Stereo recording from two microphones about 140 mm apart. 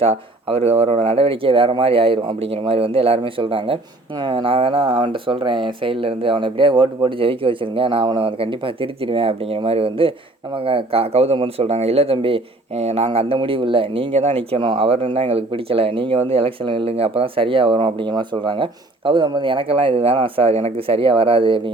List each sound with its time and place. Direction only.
0.0 s speech: 45° right (ahead or behind)